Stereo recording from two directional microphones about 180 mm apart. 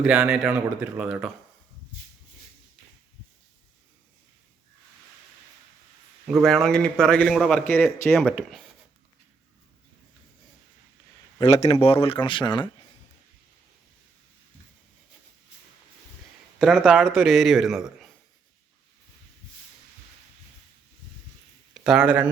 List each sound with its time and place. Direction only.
0.0 s a man's voice: 5° right (ahead or behind)
6.2 s a man's voice: centre (ahead or behind)
11.3 s speech: 35° left (ahead or behind)
16.6 s a man's voice: centre (ahead or behind)
21.8 s a man's voice: 5° right (ahead or behind)